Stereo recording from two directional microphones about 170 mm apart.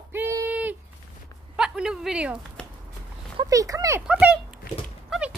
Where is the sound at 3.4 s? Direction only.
20° right (ahead or behind).